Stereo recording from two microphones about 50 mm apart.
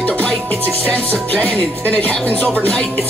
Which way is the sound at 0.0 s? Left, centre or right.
Left.